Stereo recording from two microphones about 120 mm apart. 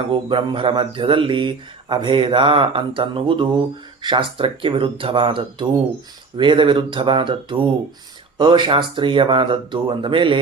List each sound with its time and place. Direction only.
0.1 s speech: 45° right (ahead or behind)